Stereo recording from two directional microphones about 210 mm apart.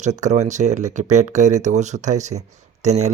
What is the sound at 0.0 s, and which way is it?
Speech, 35° right (ahead or behind).